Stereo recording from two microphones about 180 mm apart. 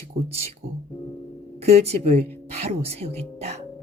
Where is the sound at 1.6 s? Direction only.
35° right (ahead or behind).